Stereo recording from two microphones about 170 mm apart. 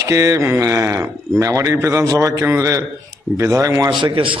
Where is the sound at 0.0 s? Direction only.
20° right (ahead or behind).